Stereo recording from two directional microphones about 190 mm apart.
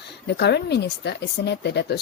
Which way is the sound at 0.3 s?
60° left (ahead or behind).